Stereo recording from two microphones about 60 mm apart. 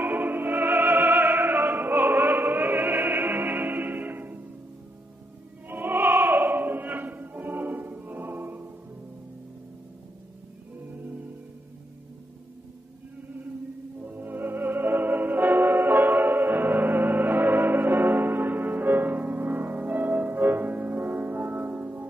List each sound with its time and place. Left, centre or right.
0.0 s opera: right
5.7 s opera: right
14.0 s music: right